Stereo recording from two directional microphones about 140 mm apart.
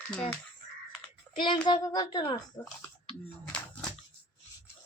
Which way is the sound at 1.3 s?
35° left (ahead or behind).